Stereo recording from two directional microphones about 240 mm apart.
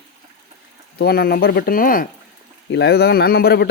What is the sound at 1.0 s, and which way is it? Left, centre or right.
Speech, left.